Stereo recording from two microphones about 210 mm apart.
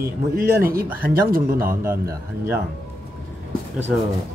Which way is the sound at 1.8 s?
10° right (ahead or behind).